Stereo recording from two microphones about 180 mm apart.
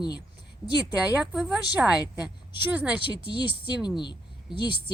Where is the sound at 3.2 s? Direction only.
25° left (ahead or behind).